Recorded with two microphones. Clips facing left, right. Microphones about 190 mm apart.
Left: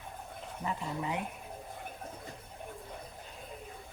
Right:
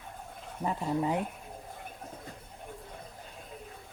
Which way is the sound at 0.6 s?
45° right (ahead or behind).